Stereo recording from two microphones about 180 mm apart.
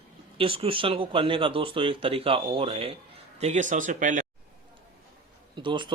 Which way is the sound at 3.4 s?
45° right (ahead or behind).